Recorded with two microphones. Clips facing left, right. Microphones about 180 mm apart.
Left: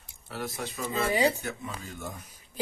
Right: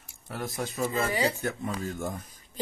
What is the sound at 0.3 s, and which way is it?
Speech, 45° right (ahead or behind).